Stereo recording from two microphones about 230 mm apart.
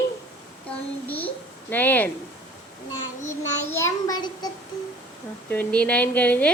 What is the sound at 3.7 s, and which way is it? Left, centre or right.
Speech, centre.